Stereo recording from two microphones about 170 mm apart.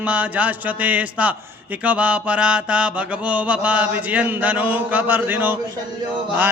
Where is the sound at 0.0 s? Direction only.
10° right (ahead or behind).